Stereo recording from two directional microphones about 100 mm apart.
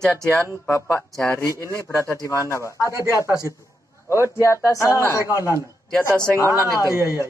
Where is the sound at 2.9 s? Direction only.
30° right (ahead or behind).